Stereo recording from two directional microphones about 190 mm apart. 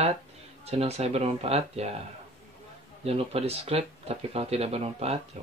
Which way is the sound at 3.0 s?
30° right (ahead or behind).